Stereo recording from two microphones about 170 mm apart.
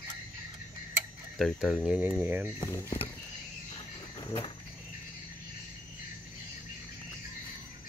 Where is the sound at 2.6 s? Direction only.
15° left (ahead or behind).